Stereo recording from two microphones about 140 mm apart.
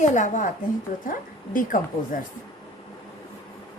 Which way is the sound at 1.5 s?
75° left (ahead or behind).